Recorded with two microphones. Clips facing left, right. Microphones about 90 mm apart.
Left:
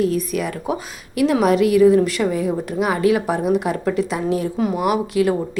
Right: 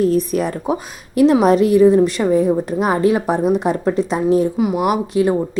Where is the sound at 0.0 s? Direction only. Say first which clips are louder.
Right 4 dB; 35° right (ahead or behind).